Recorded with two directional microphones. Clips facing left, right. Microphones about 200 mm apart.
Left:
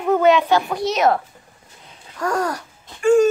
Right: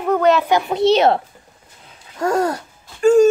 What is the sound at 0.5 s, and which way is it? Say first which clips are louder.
Speech: right 4 dB; 20° right (ahead or behind).